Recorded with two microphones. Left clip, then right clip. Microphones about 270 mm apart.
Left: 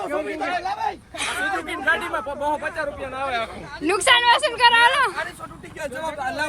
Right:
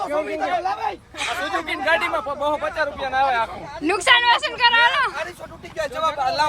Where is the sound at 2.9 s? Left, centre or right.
Right.